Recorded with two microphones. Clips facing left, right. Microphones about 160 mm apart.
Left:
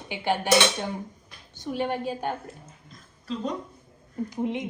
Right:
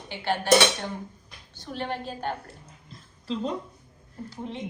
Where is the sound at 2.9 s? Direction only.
30° right (ahead or behind).